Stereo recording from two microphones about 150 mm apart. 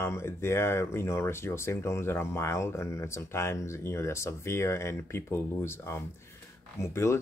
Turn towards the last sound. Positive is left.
turn(degrees=20)  # may be behind; listen again after turning